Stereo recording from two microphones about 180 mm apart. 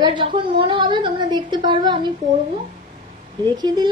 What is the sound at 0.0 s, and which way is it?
A woman's voice, 25° right (ahead or behind).